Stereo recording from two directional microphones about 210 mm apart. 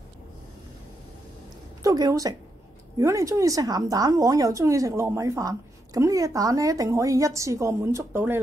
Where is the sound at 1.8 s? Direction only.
15° right (ahead or behind).